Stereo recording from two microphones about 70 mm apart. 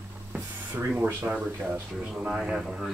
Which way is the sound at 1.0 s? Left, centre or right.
Right.